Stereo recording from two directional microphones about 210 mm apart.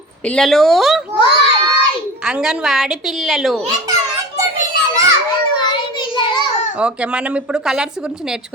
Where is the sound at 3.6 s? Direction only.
15° right (ahead or behind).